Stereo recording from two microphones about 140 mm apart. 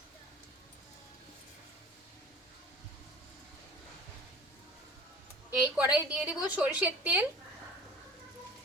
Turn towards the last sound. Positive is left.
turn(degrees=-10)  # may be behind; listen again after turning